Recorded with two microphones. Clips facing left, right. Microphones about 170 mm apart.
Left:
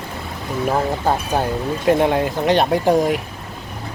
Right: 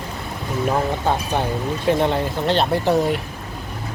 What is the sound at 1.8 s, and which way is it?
Speech, 5° left (ahead or behind).